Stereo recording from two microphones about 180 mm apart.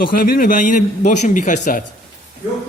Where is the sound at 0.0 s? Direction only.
50° left (ahead or behind).